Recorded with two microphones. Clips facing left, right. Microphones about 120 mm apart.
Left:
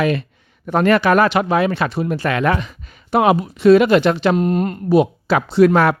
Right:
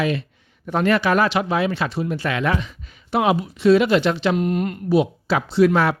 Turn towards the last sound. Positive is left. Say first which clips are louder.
# left 4 dB
turn(degrees=55)  # may be behind; listen again after turning